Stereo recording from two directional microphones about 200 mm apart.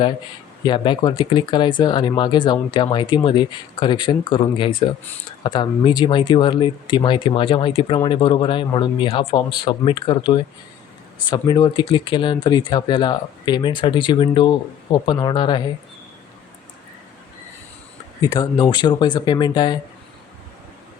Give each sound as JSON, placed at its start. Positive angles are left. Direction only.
{"t": 0.6, "sound": "speech", "side_deg": 20}
{"t": 18.2, "sound": "speech", "side_deg": 20}